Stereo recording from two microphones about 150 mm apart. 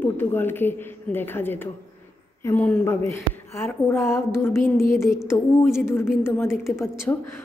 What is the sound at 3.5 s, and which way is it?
A woman's voice, 15° left (ahead or behind).